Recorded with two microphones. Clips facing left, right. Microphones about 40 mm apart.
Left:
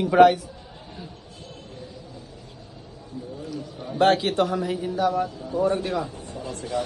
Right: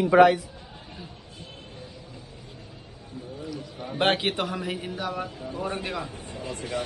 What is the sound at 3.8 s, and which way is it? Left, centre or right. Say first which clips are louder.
A man's voice: left 4 dB; right.